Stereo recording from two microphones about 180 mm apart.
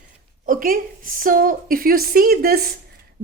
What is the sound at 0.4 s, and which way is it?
A woman's voice, 50° right (ahead or behind).